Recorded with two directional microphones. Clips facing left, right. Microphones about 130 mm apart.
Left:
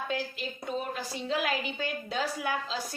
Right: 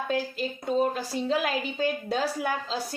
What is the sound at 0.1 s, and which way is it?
Speech, 40° right (ahead or behind).